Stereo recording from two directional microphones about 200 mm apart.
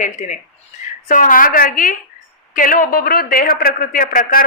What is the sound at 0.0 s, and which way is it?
A woman's voice, 35° left (ahead or behind).